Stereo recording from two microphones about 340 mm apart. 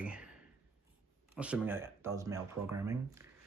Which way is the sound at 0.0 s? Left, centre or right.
Centre.